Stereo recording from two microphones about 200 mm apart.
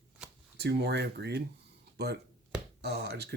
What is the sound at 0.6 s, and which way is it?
Speech, 55° right (ahead or behind).